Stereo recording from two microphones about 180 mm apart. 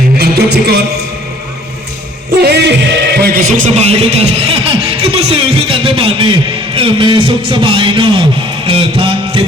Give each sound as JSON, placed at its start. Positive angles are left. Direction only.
{"t": 0.2, "sound": "music", "side_deg": -60}
{"t": 2.4, "sound": "music", "side_deg": -70}
{"t": 3.8, "sound": "speech", "side_deg": -35}
{"t": 8.6, "sound": "music", "side_deg": -30}